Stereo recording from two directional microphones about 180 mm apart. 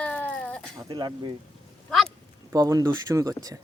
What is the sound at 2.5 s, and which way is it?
A man's voice, 20° right (ahead or behind).